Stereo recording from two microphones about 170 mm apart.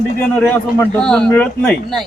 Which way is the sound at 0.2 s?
10° left (ahead or behind).